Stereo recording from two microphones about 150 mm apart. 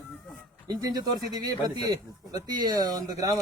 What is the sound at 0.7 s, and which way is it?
Speech, 25° right (ahead or behind).